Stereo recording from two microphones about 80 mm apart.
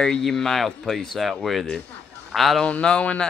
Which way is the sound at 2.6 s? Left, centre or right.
Centre.